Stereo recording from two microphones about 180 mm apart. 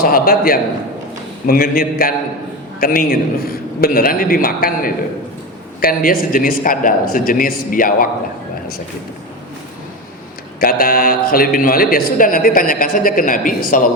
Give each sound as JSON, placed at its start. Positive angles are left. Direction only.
{"t": 0.0, "sound": "a man's voice", "side_deg": 55}
{"t": 10.6, "sound": "speech", "side_deg": 55}